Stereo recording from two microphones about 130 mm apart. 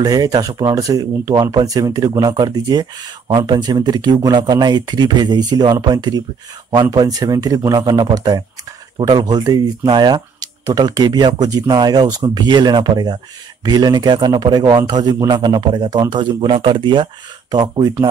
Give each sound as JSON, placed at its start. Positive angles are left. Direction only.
{"t": 0.0, "sound": "speech", "side_deg": -30}